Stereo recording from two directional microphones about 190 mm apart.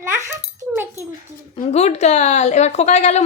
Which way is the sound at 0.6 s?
15° right (ahead or behind).